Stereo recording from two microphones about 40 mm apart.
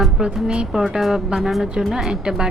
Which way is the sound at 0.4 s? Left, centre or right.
Right.